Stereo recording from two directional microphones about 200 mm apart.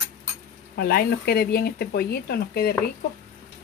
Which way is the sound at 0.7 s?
50° left (ahead or behind).